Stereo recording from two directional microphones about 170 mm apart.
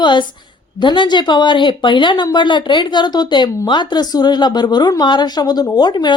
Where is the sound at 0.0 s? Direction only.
25° left (ahead or behind).